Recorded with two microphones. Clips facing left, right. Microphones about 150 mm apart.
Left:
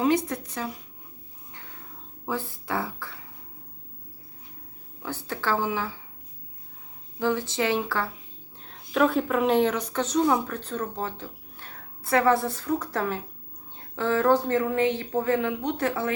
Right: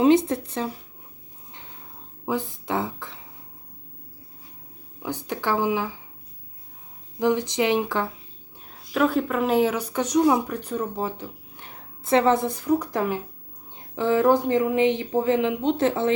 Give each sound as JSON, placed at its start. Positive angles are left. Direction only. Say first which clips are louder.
{"t": 0.0, "sound": "a woman's voice", "louder": "right 6 dB", "side_deg": -25}
{"t": 2.2, "sound": "a woman's voice", "louder": "right 4 dB", "side_deg": -15}
{"t": 5.0, "sound": "speech", "louder": "right 2 dB", "side_deg": -15}
{"t": 7.2, "sound": "speech", "louder": "right 4 dB", "side_deg": -15}
{"t": 8.6, "sound": "speech", "louder": "even", "side_deg": -5}